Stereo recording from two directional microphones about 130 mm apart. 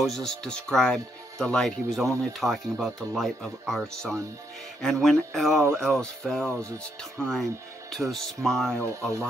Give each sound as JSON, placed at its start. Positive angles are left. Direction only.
{"t": 0.0, "sound": "speech", "side_deg": 5}